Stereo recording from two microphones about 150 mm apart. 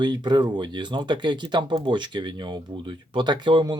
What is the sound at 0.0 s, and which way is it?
Speech, 30° right (ahead or behind).